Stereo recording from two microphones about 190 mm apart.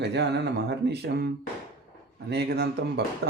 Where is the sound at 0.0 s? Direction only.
65° right (ahead or behind).